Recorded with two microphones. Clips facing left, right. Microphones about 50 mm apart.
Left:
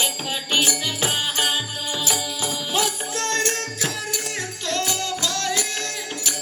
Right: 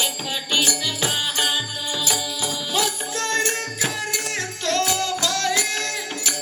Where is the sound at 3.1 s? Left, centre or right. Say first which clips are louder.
Right 2 dB; centre.